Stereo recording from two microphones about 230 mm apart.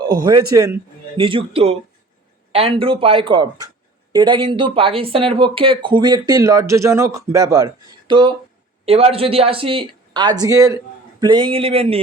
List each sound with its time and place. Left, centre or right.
0.0 s a man's voice: centre